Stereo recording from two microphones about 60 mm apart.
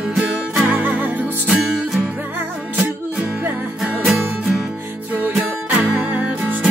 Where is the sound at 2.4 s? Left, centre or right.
Right.